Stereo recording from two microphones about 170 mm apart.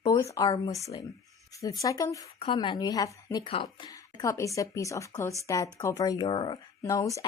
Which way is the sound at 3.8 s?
20° left (ahead or behind).